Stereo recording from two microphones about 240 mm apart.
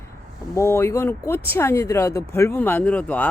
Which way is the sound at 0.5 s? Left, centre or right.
Centre.